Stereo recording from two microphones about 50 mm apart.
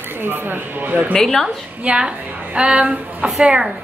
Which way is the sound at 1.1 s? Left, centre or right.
Centre.